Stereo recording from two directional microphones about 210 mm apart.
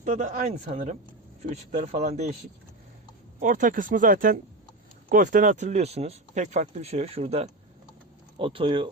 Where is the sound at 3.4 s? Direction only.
40° right (ahead or behind).